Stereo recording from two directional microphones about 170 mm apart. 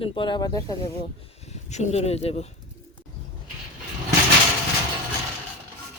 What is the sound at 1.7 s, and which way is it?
Speech, 40° left (ahead or behind).